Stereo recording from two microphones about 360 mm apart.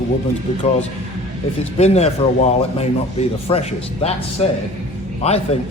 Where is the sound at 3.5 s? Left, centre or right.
Centre.